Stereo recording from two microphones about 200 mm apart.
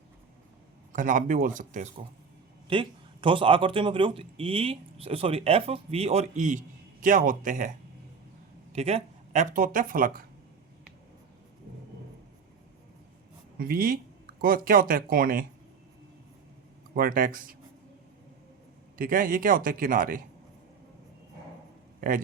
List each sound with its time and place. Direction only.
0.9 s speech: 40° right (ahead or behind)
2.6 s speech: 25° right (ahead or behind); by 7.7 s 40° right (ahead or behind)
8.7 s speech: 30° right (ahead or behind)
13.6 s speech: 45° right (ahead or behind)
16.9 s speech: 45° right (ahead or behind)
18.9 s speech: 45° right (ahead or behind)